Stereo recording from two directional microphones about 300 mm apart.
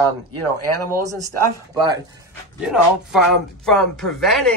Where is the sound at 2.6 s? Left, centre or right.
Centre.